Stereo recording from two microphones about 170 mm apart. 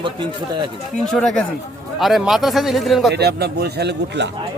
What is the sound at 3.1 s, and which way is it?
Speech, 70° right (ahead or behind).